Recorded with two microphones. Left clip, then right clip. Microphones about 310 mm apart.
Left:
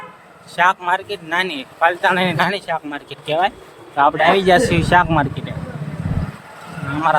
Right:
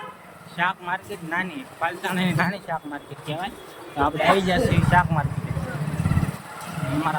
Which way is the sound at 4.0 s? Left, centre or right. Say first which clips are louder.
Left 6 dB; centre.